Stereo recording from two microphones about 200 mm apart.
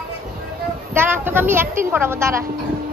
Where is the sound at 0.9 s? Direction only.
10° right (ahead or behind).